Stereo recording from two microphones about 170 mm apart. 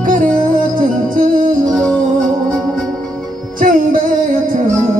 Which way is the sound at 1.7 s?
5° left (ahead or behind).